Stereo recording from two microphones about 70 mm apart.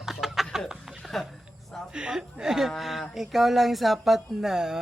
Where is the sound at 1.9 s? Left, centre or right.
Centre.